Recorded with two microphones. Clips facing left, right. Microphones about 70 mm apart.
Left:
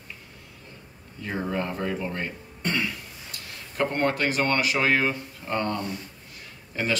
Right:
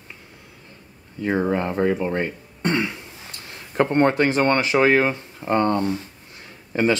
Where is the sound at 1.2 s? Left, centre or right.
Right.